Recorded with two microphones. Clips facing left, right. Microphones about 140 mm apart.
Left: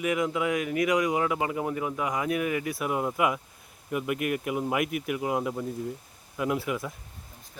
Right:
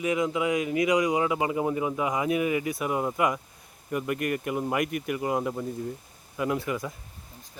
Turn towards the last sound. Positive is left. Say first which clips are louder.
# even
turn(degrees=0)  # may be behind; listen again after turning